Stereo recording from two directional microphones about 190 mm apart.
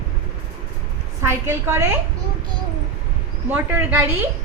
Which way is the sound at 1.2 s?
15° right (ahead or behind).